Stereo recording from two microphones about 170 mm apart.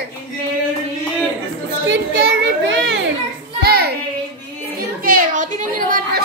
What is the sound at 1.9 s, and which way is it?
Children playing, 90° right.